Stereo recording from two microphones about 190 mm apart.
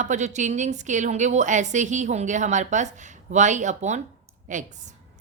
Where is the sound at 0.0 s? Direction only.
40° right (ahead or behind).